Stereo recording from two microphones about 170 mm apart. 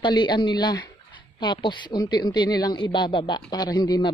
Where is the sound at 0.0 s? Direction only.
25° left (ahead or behind).